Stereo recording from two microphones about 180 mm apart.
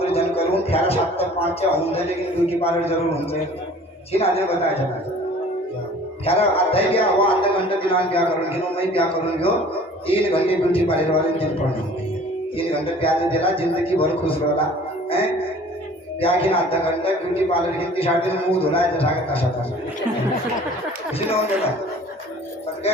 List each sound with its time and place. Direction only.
0.0 s speech: 35° left (ahead or behind)
6.2 s speech: 30° left (ahead or behind)
12.5 s speech: 30° left (ahead or behind)
16.2 s speech: 30° left (ahead or behind)